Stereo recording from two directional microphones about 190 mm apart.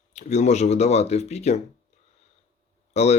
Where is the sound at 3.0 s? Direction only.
35° left (ahead or behind).